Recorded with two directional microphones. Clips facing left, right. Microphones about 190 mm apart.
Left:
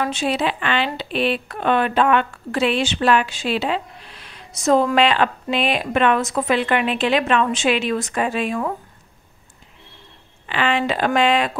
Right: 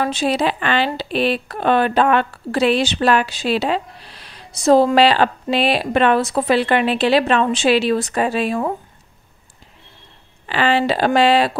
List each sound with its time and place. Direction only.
0.0 s speech: 35° right (ahead or behind)
10.4 s speech: 35° right (ahead or behind)